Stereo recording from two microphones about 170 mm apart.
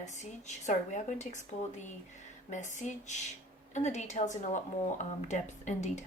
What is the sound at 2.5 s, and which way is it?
A woman's voice, 45° left (ahead or behind).